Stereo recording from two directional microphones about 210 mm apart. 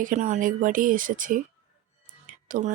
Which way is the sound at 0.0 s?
35° right (ahead or behind).